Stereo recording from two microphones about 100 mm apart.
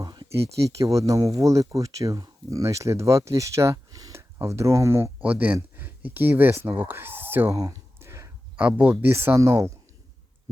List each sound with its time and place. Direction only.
0.0 s a sound: 45° right (ahead or behind)
0.8 s speech: 35° right (ahead or behind)
5.2 s speech: 15° right (ahead or behind)
7.5 s speech: 40° right (ahead or behind)
7.9 s a sound: 25° right (ahead or behind)
8.5 s speech: 15° right (ahead or behind); by 9.7 s 30° right (ahead or behind)